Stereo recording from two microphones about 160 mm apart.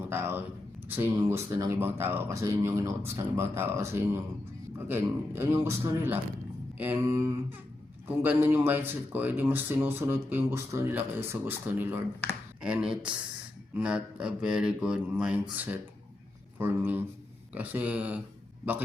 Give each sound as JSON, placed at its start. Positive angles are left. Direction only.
{"t": 0.1, "sound": "speech", "side_deg": -15}